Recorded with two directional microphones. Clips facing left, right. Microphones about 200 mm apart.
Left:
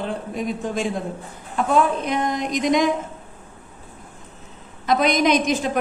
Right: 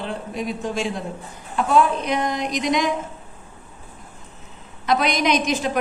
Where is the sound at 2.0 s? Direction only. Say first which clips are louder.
Even; 50° left (ahead or behind).